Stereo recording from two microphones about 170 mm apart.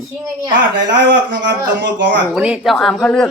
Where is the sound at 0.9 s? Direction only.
90° right.